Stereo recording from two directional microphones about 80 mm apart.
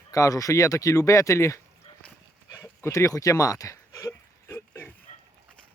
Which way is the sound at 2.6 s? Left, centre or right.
Left.